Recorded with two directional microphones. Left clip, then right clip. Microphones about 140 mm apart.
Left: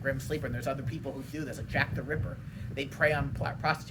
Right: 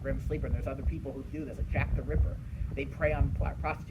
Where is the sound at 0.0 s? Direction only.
45° left (ahead or behind).